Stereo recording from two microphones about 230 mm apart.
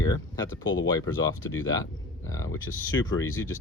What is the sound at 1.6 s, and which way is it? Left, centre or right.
Speech, centre.